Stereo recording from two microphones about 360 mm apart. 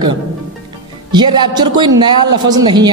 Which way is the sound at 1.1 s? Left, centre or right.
Centre.